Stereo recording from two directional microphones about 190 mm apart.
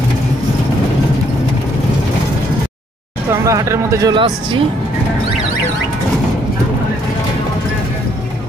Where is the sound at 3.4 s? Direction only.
15° right (ahead or behind).